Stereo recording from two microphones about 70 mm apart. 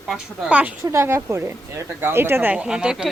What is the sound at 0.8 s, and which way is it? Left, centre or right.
Speech, right.